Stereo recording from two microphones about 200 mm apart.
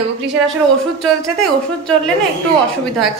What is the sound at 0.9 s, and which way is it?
A woman's voice, centre (ahead or behind).